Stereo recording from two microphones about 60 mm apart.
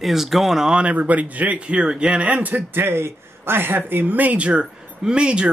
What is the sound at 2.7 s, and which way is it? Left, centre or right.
Speech, right.